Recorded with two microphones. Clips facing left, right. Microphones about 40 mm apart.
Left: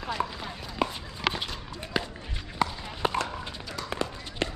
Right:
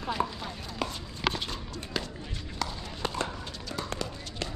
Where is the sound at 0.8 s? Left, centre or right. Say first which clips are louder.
Left 5 dB; centre.